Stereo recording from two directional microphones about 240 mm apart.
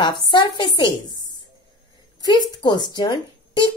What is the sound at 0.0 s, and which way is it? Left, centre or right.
Speech, centre.